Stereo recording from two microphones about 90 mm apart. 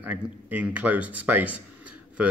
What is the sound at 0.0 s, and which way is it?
Speech, 15° right (ahead or behind).